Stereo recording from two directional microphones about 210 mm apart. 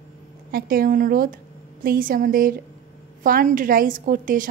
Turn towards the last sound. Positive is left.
turn(degrees=-40)  # may be behind; listen again after turning